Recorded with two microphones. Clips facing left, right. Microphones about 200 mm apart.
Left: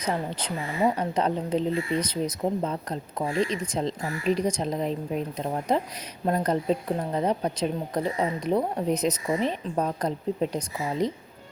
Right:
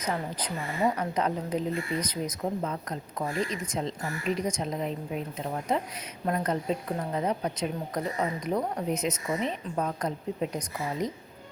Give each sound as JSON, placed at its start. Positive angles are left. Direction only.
{"t": 0.0, "sound": "a woman's voice", "side_deg": 30}
{"t": 6.2, "sound": "a woman's voice", "side_deg": 35}